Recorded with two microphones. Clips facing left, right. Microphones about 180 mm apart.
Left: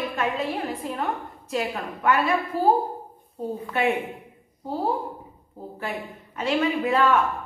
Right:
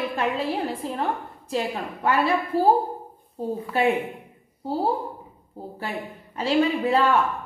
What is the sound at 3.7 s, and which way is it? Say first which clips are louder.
Speech: right 2 dB; 30° right (ahead or behind).